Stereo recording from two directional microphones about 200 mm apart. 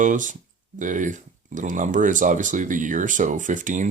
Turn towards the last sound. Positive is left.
turn(degrees=-40)  # may be behind; listen again after turning